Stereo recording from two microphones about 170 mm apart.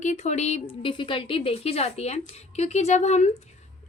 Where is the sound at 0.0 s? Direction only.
45° left (ahead or behind).